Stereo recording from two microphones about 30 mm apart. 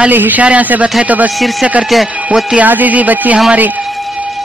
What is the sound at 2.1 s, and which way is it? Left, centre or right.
Speech, right.